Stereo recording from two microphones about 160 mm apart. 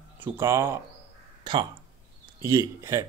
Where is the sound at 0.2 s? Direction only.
15° right (ahead or behind).